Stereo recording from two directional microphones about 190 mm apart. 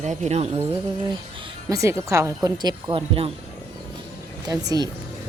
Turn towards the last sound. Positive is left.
turn(degrees=-20)  # may be behind; listen again after turning